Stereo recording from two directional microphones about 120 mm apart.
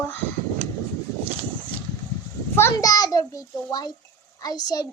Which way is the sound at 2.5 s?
25° left (ahead or behind).